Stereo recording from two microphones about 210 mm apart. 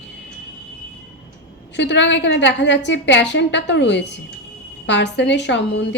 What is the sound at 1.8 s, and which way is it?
A woman's voice, 55° left (ahead or behind).